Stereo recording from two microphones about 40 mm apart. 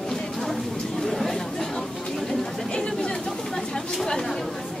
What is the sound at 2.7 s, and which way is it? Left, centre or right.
Chatter, centre.